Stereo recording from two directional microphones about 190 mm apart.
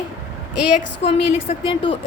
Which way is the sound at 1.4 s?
30° left (ahead or behind).